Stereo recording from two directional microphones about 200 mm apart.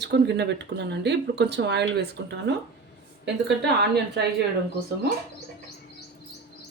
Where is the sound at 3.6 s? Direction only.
55° right (ahead or behind).